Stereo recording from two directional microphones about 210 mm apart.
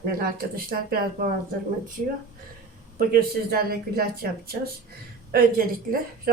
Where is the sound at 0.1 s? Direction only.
45° right (ahead or behind).